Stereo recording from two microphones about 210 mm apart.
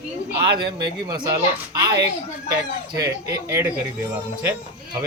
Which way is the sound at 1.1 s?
20° right (ahead or behind).